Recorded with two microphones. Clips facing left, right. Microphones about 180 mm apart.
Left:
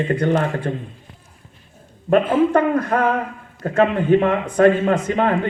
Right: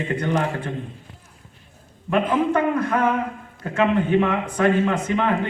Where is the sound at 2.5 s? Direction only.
45° left (ahead or behind).